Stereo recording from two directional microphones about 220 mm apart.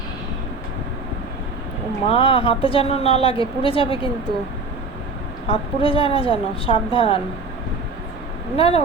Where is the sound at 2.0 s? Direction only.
25° left (ahead or behind).